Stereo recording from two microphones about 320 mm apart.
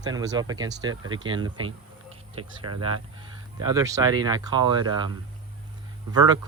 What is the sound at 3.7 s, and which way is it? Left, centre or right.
Speech, centre.